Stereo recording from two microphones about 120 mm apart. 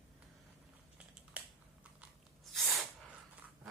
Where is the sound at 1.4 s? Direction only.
10° right (ahead or behind).